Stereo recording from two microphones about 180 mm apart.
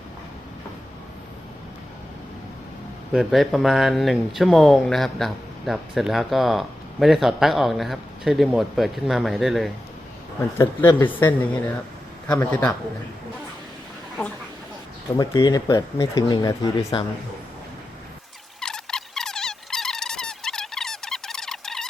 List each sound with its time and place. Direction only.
3.1 s speech: centre (ahead or behind)
10.6 s speech: 15° left (ahead or behind)
12.4 s speech: 10° left (ahead or behind)
15.2 s speech: 25° left (ahead or behind)
18.6 s mosquito: 5° left (ahead or behind)